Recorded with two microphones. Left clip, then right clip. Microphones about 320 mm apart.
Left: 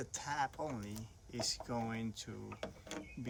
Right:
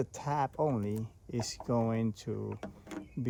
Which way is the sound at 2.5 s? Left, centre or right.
Centre.